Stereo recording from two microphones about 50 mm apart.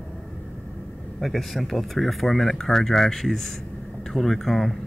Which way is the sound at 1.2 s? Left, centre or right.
Centre.